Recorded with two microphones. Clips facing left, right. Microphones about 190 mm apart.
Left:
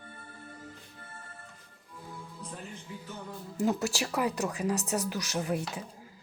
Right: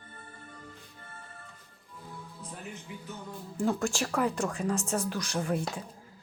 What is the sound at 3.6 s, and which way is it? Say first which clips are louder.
Speech: even; 5° left (ahead or behind).